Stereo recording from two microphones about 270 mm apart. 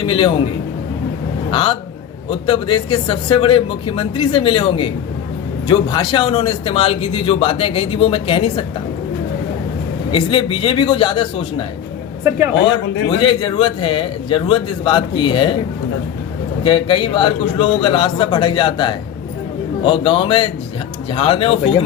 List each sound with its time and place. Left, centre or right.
0.0 s speech: centre
1.5 s speech: centre
10.1 s speech: centre
12.6 s speech: centre
16.6 s speech: centre